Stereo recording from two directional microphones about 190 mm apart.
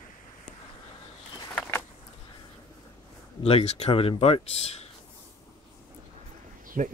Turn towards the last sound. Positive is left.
turn(degrees=-45)  # may be behind; listen again after turning